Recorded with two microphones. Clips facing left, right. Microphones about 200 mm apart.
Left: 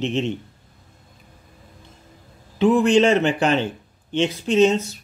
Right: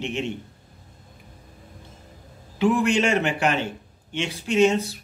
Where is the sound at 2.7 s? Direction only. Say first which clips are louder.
Left 6 dB; 30° left (ahead or behind).